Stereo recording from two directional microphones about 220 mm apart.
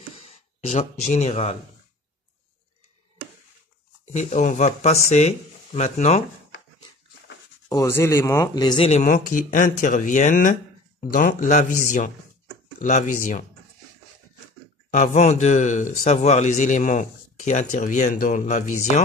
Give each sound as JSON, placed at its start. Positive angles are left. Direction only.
{"t": 0.2, "sound": "speech", "side_deg": 30}
{"t": 4.1, "sound": "speech", "side_deg": 35}
{"t": 7.7, "sound": "speech", "side_deg": 10}
{"t": 14.9, "sound": "speech", "side_deg": 35}